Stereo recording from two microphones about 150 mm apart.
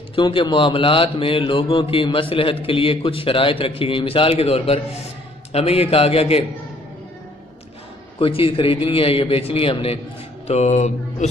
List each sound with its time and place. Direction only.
0.1 s a man's voice: 35° left (ahead or behind)
8.2 s a man's voice: 40° left (ahead or behind)
10.4 s speech: 45° left (ahead or behind)